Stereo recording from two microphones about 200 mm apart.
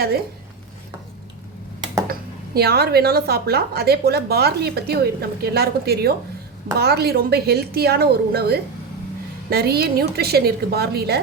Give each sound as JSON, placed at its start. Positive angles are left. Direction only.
{"t": 2.6, "sound": "a woman's voice", "side_deg": -55}